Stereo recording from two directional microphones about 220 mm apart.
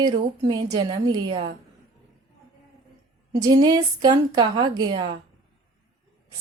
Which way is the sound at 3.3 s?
20° right (ahead or behind).